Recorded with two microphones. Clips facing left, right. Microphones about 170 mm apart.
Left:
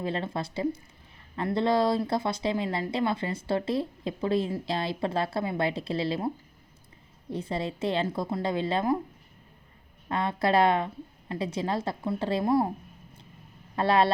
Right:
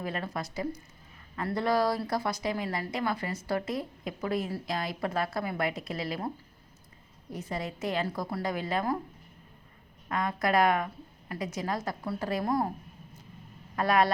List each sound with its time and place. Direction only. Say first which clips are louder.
0.0 s speech: left 4 dB; 25° left (ahead or behind)
10.1 s speech: left 3 dB; 30° left (ahead or behind)
13.7 s speech: left 2 dB; 30° left (ahead or behind)